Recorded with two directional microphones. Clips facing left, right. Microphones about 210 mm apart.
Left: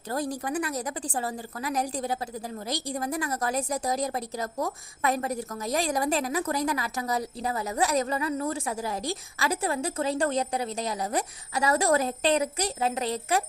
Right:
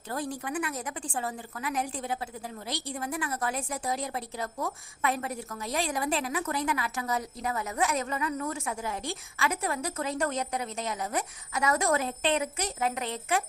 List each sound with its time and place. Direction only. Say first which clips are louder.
0.1 s a woman's voice: left 4 dB; 40° left (ahead or behind)